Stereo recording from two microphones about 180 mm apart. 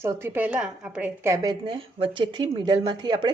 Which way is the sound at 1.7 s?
30° right (ahead or behind).